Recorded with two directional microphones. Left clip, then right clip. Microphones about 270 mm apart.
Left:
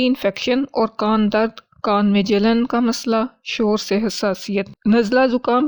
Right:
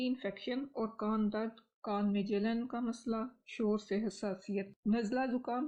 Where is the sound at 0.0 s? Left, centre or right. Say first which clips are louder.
Left 19 dB; left.